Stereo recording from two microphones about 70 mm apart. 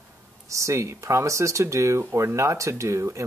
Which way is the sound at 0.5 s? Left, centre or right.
Right.